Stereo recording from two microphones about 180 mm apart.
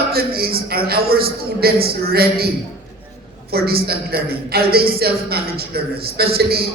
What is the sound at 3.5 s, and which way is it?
A man's voice, 60° right (ahead or behind).